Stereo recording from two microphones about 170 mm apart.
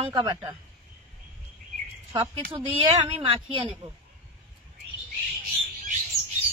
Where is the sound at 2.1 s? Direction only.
30° right (ahead or behind).